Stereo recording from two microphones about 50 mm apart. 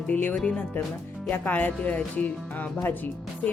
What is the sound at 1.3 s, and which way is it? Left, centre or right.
Speech, left.